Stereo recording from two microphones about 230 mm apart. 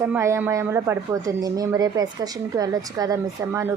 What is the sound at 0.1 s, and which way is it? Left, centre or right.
A woman's voice, centre.